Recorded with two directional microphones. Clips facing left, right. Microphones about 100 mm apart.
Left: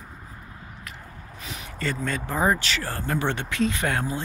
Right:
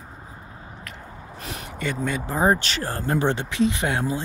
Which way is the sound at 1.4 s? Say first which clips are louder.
Right 3 dB; 50° right (ahead or behind).